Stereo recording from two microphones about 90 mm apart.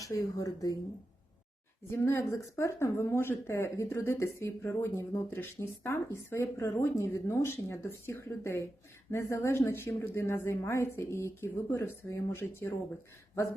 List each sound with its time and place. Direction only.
0.0 s speech: 40° left (ahead or behind)
1.9 s speech: 30° left (ahead or behind)